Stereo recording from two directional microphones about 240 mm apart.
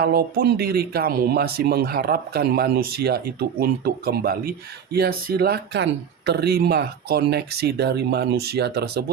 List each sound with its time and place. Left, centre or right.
0.0 s speech: right